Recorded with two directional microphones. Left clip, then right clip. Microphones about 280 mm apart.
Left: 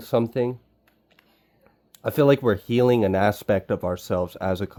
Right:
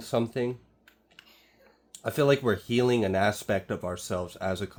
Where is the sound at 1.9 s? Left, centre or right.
Left.